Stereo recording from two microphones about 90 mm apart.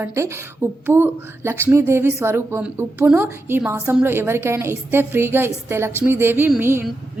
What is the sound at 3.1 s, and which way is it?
A woman's voice, 15° right (ahead or behind).